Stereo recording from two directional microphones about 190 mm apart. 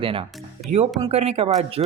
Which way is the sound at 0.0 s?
30° right (ahead or behind).